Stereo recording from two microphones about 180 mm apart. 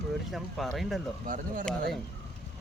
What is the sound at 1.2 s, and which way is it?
Speech, 50° right (ahead or behind).